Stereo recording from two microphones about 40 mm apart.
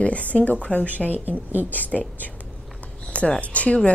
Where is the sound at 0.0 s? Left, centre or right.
Left.